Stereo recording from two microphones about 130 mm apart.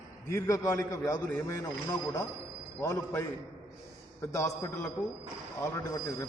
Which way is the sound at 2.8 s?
30° left (ahead or behind).